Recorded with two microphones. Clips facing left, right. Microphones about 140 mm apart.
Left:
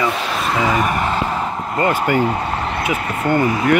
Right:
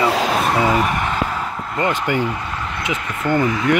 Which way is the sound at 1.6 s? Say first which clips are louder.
Left 2 dB; 45° left (ahead or behind).